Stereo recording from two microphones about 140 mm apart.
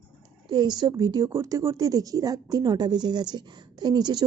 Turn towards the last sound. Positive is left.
turn(degrees=-30)  # may be behind; listen again after turning